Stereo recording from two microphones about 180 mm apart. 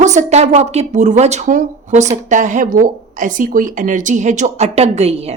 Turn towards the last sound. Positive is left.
turn(degrees=-35)  # may be behind; listen again after turning